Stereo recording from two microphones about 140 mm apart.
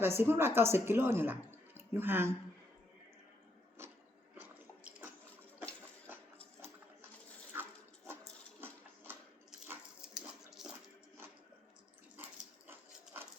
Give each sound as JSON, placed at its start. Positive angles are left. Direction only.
{"t": 0.0, "sound": "a woman's voice", "side_deg": -15}
{"t": 4.4, "sound": "drip", "side_deg": -10}
{"t": 6.1, "sound": "dog", "side_deg": -15}
{"t": 9.6, "sound": "dog", "side_deg": -5}
{"t": 10.6, "sound": "music", "side_deg": -5}
{"t": 12.2, "sound": "dog", "side_deg": -15}